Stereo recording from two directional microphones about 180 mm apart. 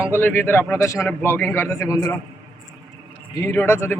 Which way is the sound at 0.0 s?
10° left (ahead or behind).